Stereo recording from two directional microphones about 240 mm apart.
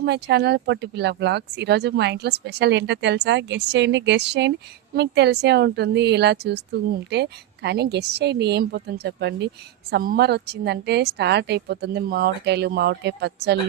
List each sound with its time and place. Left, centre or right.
0.0 s speech: right